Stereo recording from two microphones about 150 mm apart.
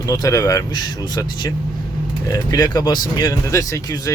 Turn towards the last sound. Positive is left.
turn(degrees=25)  # may be behind; listen again after turning